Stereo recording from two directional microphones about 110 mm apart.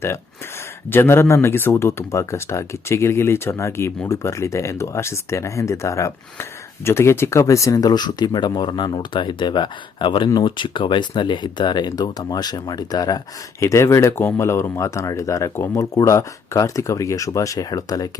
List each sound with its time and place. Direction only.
0.9 s speech: 20° left (ahead or behind)